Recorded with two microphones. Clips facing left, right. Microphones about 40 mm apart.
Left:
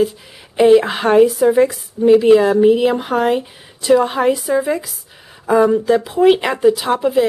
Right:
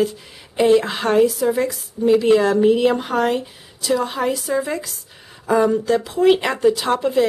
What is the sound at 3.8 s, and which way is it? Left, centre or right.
Speech, left.